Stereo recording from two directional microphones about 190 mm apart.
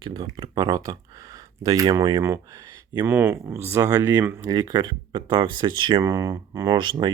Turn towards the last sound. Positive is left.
turn(degrees=-25)  # may be behind; listen again after turning